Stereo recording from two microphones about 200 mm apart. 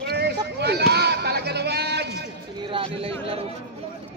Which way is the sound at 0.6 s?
55° right (ahead or behind).